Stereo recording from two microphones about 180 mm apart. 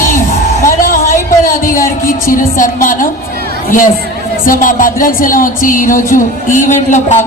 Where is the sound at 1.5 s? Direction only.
50° left (ahead or behind).